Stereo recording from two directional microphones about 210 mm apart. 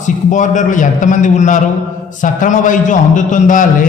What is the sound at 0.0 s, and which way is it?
A man's voice, 35° left (ahead or behind).